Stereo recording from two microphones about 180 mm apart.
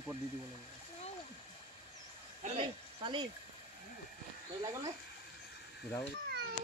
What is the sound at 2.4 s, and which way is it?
Speech, 30° right (ahead or behind).